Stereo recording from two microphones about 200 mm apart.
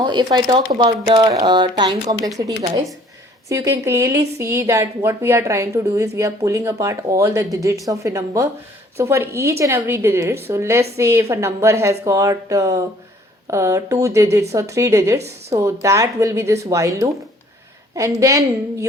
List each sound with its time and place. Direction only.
0.0 s speech: 20° right (ahead or behind)
3.5 s a woman's voice: 15° right (ahead or behind)
17.9 s a woman's voice: 15° right (ahead or behind)